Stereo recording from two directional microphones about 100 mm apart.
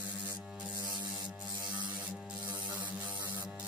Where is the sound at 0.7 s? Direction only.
40° right (ahead or behind).